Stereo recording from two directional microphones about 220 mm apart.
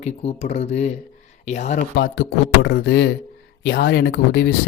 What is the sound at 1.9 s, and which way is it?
Speech, 50° left (ahead or behind).